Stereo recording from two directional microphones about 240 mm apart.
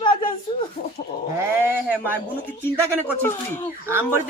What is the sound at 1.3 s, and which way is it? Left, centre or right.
Speech, centre.